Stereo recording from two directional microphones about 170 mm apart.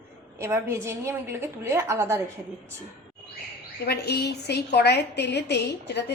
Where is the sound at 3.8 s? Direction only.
70° left (ahead or behind).